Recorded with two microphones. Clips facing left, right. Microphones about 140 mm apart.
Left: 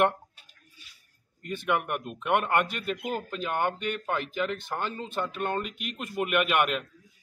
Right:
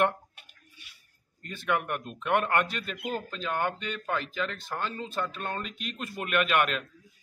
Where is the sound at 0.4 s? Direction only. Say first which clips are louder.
Right 2 dB; 60° right (ahead or behind).